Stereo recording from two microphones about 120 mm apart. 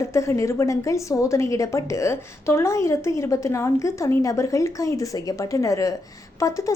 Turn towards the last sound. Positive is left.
turn(degrees=25)  # may be behind; listen again after turning